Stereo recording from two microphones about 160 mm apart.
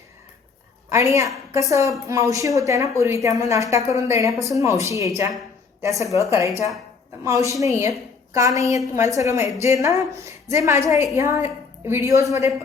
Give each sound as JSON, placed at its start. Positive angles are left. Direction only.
{"t": 0.9, "sound": "a woman's voice", "side_deg": -15}